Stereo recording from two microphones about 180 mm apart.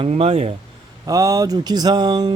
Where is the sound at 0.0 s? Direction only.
35° right (ahead or behind).